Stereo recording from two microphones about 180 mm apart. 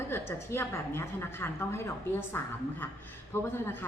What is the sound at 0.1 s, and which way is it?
A woman's voice, 15° left (ahead or behind).